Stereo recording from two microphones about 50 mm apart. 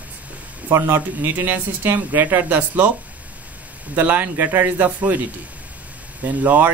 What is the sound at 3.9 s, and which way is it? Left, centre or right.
Speech, right.